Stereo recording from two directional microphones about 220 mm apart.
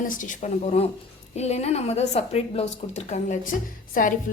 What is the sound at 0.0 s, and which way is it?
A woman's voice, 35° left (ahead or behind).